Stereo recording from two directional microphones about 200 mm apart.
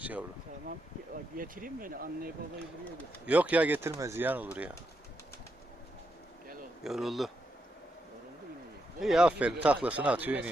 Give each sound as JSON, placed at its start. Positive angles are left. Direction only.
{"t": 0.0, "sound": "speech", "side_deg": -5}
{"t": 1.4, "sound": "speech", "side_deg": -45}
{"t": 3.2, "sound": "speech", "side_deg": -5}
{"t": 6.8, "sound": "speech", "side_deg": 0}
{"t": 9.0, "sound": "speech", "side_deg": 0}